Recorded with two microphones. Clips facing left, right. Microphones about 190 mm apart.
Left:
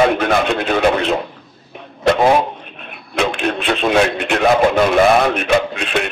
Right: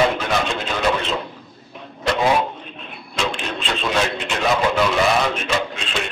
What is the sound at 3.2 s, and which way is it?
Radio, 60° left (ahead or behind).